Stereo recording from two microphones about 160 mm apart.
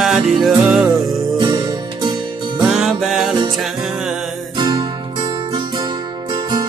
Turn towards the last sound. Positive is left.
turn(degrees=-30)  # may be behind; listen again after turning